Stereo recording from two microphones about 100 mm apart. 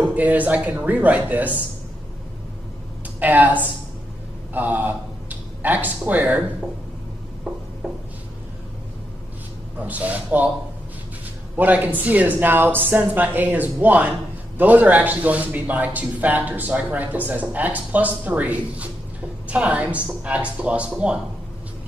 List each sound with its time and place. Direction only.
0.0 s speech: 15° right (ahead or behind)
3.2 s speech: 15° right (ahead or behind)
7.5 s a sound: 10° right (ahead or behind)
9.8 s speech: 15° right (ahead or behind)
11.5 s speech: 20° right (ahead or behind)